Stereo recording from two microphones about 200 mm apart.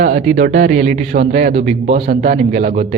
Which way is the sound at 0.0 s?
40° right (ahead or behind).